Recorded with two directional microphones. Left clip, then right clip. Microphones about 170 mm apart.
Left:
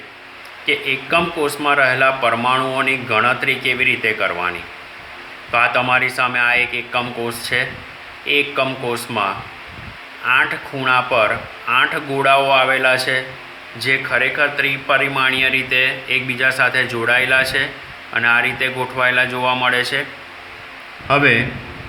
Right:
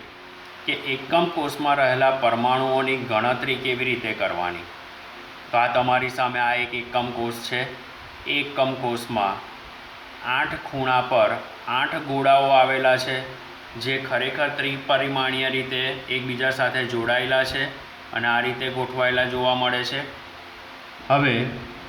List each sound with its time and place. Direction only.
0.6 s a man's voice: 20° left (ahead or behind)
10.8 s a man's voice: 25° left (ahead or behind)
21.1 s a man's voice: 25° left (ahead or behind)